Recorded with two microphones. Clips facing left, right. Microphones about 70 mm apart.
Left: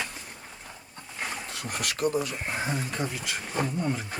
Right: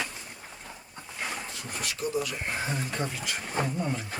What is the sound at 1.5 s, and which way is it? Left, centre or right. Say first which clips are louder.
Speech: left 3 dB; left.